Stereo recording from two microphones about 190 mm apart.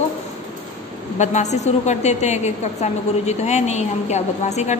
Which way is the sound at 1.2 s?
35° left (ahead or behind).